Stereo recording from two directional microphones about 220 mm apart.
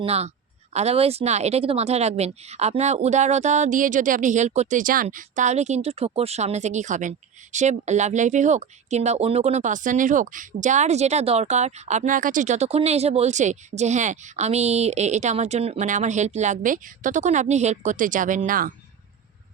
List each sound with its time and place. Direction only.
0.0 s speech: 30° right (ahead or behind)